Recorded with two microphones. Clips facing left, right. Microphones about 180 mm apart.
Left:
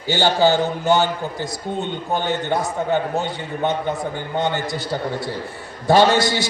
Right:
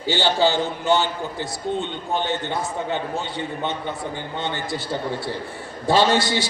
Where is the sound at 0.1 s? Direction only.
45° left (ahead or behind).